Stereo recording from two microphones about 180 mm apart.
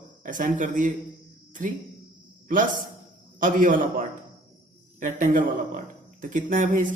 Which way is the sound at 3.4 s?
50° right (ahead or behind).